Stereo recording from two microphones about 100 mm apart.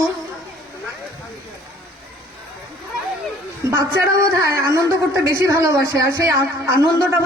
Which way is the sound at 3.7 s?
30° right (ahead or behind).